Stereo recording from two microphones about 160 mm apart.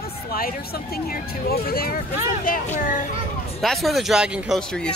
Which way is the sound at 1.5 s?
70° left (ahead or behind).